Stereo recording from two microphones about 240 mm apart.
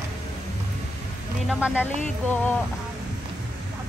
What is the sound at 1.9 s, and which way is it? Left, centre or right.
Music, right.